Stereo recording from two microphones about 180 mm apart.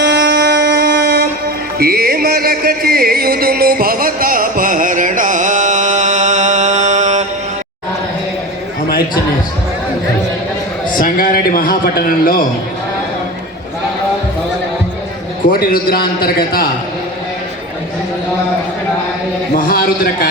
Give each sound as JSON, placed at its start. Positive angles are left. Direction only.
{"t": 0.0, "sound": "a sound", "side_deg": -70}
{"t": 1.8, "sound": "music", "side_deg": -60}
{"t": 10.9, "sound": "a man's voice", "side_deg": 50}
{"t": 15.4, "sound": "a man's voice", "side_deg": 55}
{"t": 19.5, "sound": "a man's voice", "side_deg": 50}